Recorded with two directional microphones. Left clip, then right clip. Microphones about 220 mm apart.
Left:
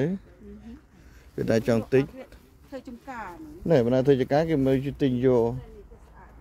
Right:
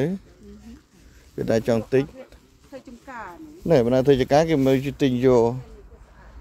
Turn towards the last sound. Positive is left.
turn(degrees=-15)  # may be behind; listen again after turning